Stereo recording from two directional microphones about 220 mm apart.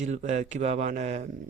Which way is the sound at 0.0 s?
30° right (ahead or behind).